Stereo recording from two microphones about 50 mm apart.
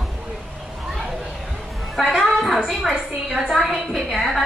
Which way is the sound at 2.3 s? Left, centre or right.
Centre.